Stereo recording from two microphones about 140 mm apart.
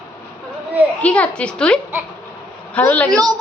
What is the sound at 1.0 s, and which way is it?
A woman's voice, 10° left (ahead or behind).